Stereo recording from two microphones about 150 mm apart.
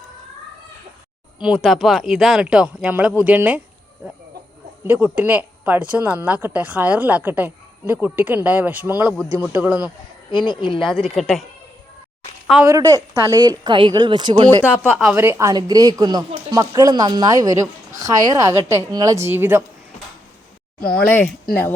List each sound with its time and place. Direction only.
1.4 s speech: 5° right (ahead or behind)
4.9 s speech: 10° right (ahead or behind)
10.3 s speech: 30° left (ahead or behind)
10.8 s speech: centre (ahead or behind)
12.6 s speech: 20° right (ahead or behind)
15.1 s speech: 15° right (ahead or behind)
20.9 s speech: 10° left (ahead or behind)